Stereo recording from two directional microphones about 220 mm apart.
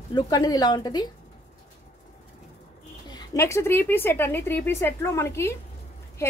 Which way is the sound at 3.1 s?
15° left (ahead or behind).